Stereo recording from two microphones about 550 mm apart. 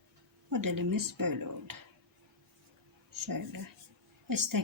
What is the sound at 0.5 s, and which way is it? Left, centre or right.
Speech, right.